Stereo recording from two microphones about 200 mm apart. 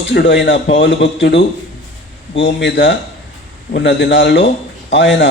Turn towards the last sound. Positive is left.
turn(degrees=60)  # may be behind; listen again after turning